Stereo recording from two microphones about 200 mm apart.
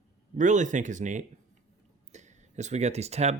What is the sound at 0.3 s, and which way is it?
Speech, 40° right (ahead or behind).